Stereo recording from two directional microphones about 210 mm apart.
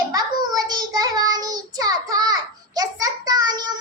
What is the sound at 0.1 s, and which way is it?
Child singing, 15° right (ahead or behind).